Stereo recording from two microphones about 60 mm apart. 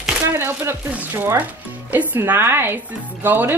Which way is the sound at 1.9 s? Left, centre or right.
Right.